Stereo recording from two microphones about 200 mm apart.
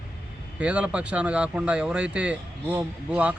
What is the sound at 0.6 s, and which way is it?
Speech, 5° right (ahead or behind).